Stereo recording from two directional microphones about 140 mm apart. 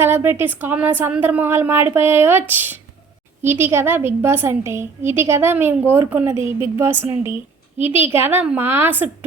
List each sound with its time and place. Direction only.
0.0 s a woman's voice: 15° right (ahead or behind)